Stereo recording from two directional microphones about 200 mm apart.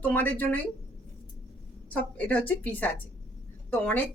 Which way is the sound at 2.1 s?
5° left (ahead or behind).